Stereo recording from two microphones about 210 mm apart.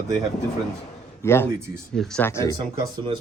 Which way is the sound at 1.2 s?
10° left (ahead or behind).